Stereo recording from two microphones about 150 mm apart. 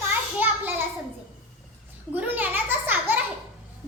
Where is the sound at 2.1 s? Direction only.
10° right (ahead or behind).